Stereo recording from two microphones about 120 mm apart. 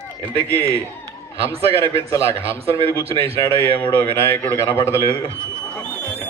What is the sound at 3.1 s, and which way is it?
Speech, 55° right (ahead or behind).